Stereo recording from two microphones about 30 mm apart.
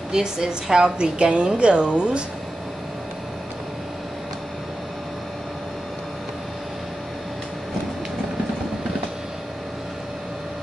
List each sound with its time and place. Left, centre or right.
0.1 s a woman's voice: right